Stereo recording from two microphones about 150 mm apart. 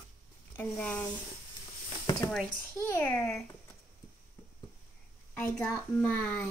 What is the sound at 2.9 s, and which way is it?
Speech, 15° left (ahead or behind).